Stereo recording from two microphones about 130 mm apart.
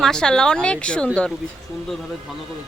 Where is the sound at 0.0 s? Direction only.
5° left (ahead or behind).